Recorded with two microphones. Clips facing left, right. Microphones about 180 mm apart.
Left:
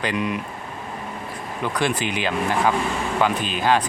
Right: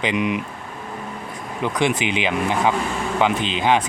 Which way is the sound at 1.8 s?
20° right (ahead or behind).